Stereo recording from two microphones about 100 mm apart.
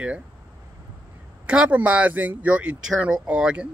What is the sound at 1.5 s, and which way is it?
Speech, 15° right (ahead or behind).